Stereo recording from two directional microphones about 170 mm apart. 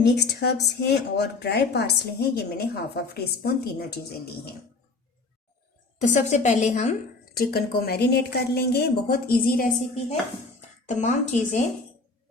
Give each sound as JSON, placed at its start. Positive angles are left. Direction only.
{"t": 0.0, "sound": "speech", "side_deg": 70}
{"t": 6.0, "sound": "a woman's voice", "side_deg": 45}
{"t": 7.3, "sound": "speech", "side_deg": 65}
{"t": 10.8, "sound": "a woman's voice", "side_deg": 45}